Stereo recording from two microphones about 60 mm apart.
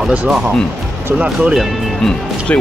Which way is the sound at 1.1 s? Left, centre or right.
Centre.